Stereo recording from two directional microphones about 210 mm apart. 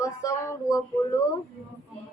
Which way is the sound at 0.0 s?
15° left (ahead or behind).